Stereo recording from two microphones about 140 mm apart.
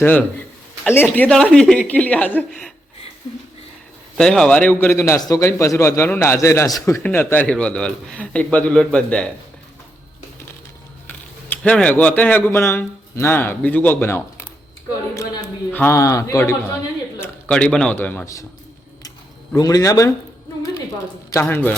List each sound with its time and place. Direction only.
0.0 s a man's voice: 10° left (ahead or behind)
2.5 s speech: centre (ahead or behind)
4.2 s a man's voice: 5° left (ahead or behind)
11.4 s a man's voice: 10° left (ahead or behind)
15.7 s a man's voice: 15° left (ahead or behind)
17.2 s a man's voice: 5° left (ahead or behind)
19.5 s a man's voice: 25° left (ahead or behind)
21.4 s a man's voice: 10° left (ahead or behind)